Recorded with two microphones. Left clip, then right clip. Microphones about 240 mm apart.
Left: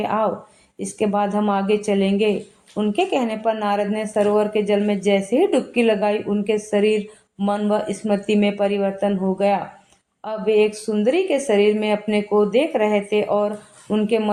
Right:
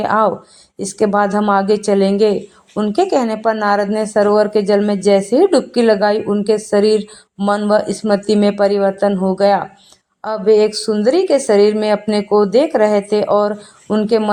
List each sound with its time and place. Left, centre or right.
0.0 s speech: right